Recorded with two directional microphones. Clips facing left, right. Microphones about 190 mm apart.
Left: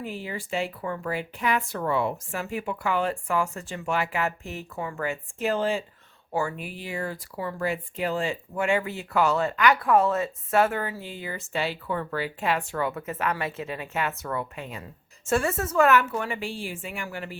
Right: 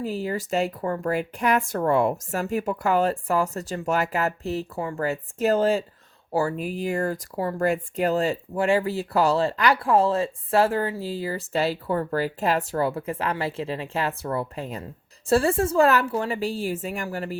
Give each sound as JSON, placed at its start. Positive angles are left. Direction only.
{"t": 0.0, "sound": "speech", "side_deg": -40}